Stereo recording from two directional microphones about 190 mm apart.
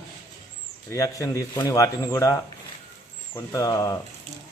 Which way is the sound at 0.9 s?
15° left (ahead or behind).